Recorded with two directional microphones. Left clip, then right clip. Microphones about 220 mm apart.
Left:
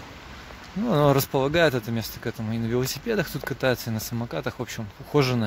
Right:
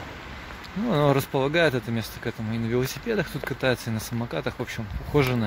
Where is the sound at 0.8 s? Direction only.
20° left (ahead or behind).